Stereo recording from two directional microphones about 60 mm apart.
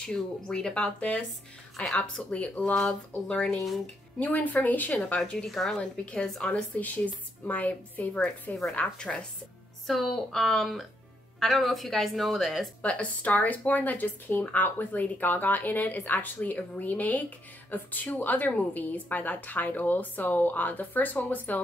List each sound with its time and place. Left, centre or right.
0.0 s speech: centre
2.3 s speech: left
3.4 s speech: centre
4.2 s speech: left
5.2 s speech: centre
5.5 s speech: centre
5.8 s speech: centre
9.8 s speech: centre
12.8 s speech: left